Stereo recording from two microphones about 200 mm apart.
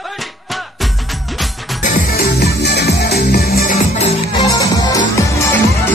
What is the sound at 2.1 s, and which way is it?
Music, 55° left (ahead or behind).